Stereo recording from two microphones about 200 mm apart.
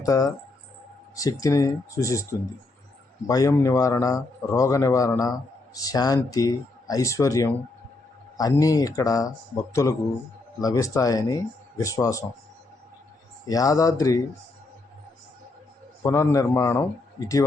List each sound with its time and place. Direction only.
0.0 s speech: 15° left (ahead or behind)
3.2 s speech: 15° left (ahead or behind)
13.5 s speech: 15° left (ahead or behind)
16.0 s speech: 15° left (ahead or behind)